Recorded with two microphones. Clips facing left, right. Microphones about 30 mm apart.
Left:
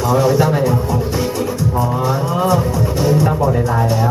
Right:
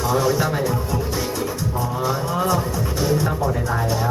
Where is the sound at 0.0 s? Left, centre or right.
Centre.